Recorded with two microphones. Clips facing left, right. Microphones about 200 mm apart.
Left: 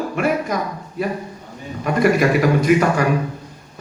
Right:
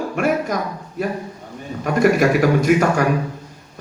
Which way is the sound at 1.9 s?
45° right (ahead or behind).